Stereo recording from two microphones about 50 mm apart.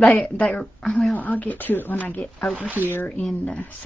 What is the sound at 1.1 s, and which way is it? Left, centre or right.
Speech, left.